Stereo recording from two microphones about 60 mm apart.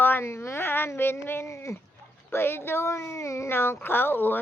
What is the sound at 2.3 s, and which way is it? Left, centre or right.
Speech, left.